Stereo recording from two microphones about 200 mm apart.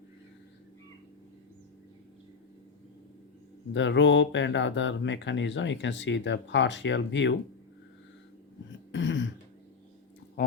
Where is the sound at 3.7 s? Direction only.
65° left (ahead or behind).